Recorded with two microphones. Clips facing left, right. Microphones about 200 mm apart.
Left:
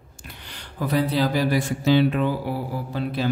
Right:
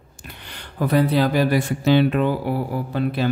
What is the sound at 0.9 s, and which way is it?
Speech, 60° right (ahead or behind).